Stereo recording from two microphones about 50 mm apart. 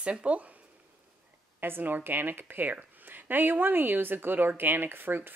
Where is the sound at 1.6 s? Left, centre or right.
Right.